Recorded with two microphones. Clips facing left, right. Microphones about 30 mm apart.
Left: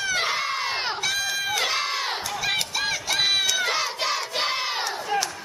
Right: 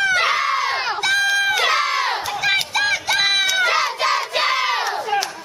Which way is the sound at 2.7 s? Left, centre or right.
Right.